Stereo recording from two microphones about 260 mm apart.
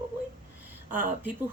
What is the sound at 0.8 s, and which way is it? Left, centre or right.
Speech, right.